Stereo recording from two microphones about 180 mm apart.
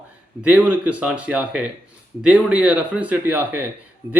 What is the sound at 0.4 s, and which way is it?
A man's voice, 10° right (ahead or behind).